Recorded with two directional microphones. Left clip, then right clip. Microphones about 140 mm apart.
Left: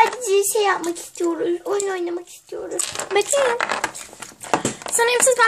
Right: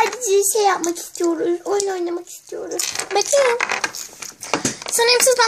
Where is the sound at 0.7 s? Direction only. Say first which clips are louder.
Right 2 dB; 20° right (ahead or behind).